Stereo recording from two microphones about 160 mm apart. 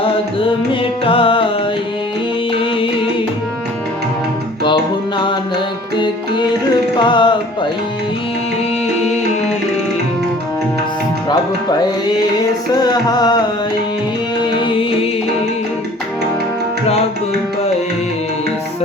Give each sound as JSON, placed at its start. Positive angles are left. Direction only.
{"t": 0.0, "sound": "music", "side_deg": 35}
{"t": 2.5, "sound": "music", "side_deg": 35}
{"t": 4.6, "sound": "music", "side_deg": 30}
{"t": 7.0, "sound": "music", "side_deg": 30}
{"t": 11.3, "sound": "music", "side_deg": 25}
{"t": 14.4, "sound": "music", "side_deg": 30}